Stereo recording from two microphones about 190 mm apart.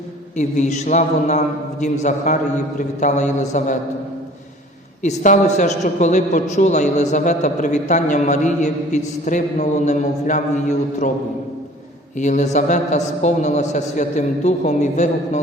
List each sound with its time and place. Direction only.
0.3 s a man's voice: 40° left (ahead or behind)
5.0 s a man's voice: 40° left (ahead or behind)
12.1 s a man's voice: 40° left (ahead or behind)